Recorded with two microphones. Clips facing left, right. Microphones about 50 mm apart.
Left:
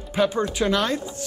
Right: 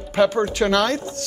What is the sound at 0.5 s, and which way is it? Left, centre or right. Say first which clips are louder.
Speech: right 3 dB; right.